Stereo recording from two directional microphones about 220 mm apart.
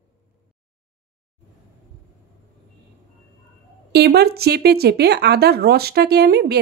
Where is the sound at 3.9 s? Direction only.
50° right (ahead or behind).